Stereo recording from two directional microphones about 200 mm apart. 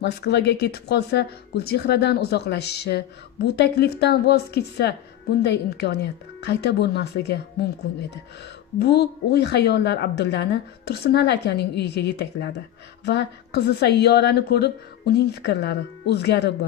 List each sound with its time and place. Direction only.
0.0 s speech: 55° left (ahead or behind)
8.7 s speech: 55° left (ahead or behind)